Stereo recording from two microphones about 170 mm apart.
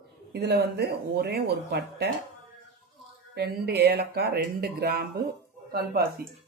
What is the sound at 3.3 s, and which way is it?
Speech, 65° right (ahead or behind).